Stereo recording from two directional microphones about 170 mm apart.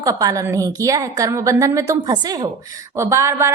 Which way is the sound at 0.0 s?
20° right (ahead or behind).